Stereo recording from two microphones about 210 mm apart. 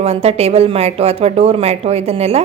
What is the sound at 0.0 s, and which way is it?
A woman's voice, 30° right (ahead or behind).